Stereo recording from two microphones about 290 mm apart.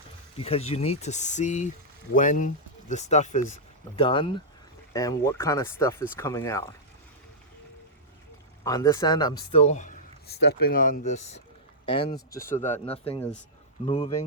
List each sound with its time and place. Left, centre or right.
0.3 s a man's voice: centre
8.6 s a man's voice: centre